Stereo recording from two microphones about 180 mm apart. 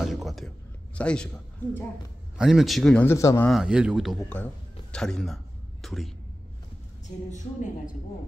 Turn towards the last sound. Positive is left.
turn(degrees=45)  # may be behind; listen again after turning